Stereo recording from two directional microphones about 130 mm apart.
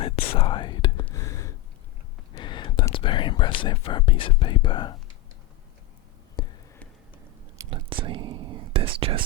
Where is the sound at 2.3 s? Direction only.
40° left (ahead or behind).